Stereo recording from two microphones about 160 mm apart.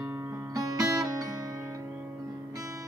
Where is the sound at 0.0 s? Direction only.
10° right (ahead or behind).